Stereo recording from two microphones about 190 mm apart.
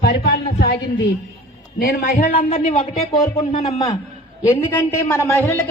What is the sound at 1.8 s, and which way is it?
A man's voice, 50° left (ahead or behind).